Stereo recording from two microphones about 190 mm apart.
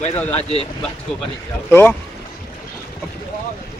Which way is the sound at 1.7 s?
10° left (ahead or behind).